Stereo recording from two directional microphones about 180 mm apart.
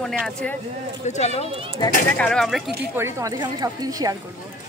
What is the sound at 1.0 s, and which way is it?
Speech, 40° left (ahead or behind).